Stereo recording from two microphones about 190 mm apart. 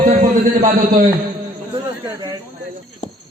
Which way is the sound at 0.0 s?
45° right (ahead or behind).